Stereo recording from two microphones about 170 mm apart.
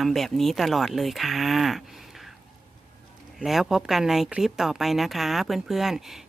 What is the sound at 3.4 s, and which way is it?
Speech, centre (ahead or behind).